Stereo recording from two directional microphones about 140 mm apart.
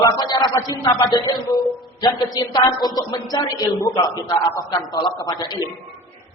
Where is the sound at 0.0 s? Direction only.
25° left (ahead or behind).